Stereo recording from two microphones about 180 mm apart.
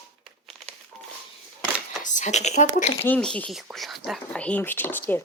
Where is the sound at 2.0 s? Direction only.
40° left (ahead or behind).